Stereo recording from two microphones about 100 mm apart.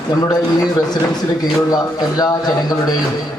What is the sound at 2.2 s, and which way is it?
Speech, 40° left (ahead or behind).